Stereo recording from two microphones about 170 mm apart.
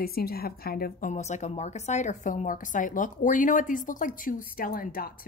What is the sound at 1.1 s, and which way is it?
A woman's voice, 40° left (ahead or behind).